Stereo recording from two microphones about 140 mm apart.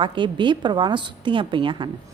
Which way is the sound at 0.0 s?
35° right (ahead or behind).